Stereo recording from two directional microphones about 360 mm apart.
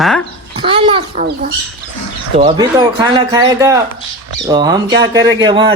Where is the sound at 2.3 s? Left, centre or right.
Centre.